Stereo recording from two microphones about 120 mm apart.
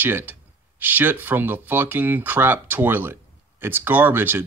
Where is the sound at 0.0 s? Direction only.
15° right (ahead or behind).